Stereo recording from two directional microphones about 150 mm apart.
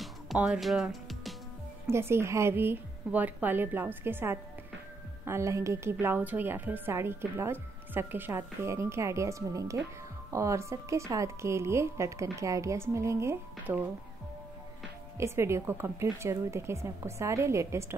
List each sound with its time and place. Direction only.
0.0 s music: 5° right (ahead or behind)
1.9 s a woman's voice: 15° right (ahead or behind)
15.1 s a woman's voice: 20° right (ahead or behind)